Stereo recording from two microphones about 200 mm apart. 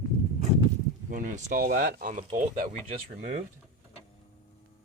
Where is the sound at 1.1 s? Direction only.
45° right (ahead or behind).